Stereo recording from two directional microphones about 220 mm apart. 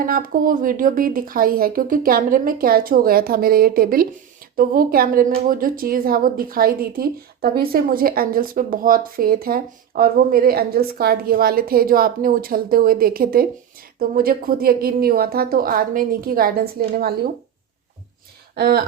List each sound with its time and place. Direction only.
0.0 s a woman's voice: 40° right (ahead or behind)
18.5 s speech: 45° right (ahead or behind)